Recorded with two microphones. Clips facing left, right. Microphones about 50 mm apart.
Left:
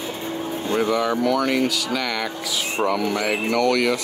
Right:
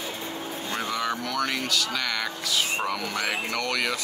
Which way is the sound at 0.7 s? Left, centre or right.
Left.